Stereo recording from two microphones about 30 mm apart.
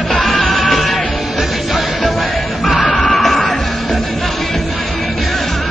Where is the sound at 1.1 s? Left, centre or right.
Centre.